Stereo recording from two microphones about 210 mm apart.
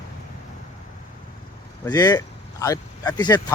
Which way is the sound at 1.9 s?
20° left (ahead or behind).